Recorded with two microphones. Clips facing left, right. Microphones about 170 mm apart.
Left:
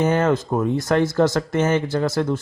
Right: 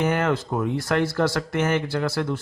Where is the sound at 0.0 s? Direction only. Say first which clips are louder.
Left 4 dB; 20° left (ahead or behind).